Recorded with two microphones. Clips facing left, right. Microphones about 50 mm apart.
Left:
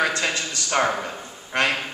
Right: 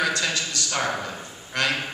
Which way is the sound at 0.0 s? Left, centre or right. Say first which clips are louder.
Left 2 dB; left.